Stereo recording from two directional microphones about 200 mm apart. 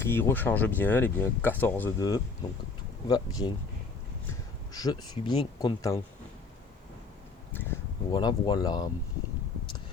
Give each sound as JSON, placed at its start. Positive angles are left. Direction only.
{"t": 0.0, "sound": "speech", "side_deg": 10}
{"t": 4.7, "sound": "speech", "side_deg": 20}
{"t": 7.5, "sound": "a sound", "side_deg": 10}
{"t": 8.1, "sound": "speech", "side_deg": 20}